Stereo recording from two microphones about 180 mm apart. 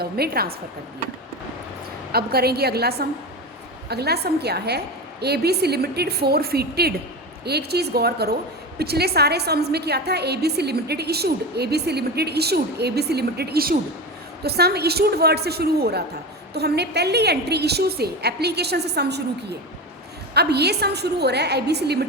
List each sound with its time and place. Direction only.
0.0 s a woman's voice: 60° right (ahead or behind)
2.1 s a woman's voice: 60° right (ahead or behind)